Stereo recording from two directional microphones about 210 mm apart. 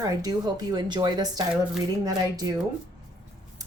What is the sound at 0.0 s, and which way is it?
A woman's voice, 20° right (ahead or behind).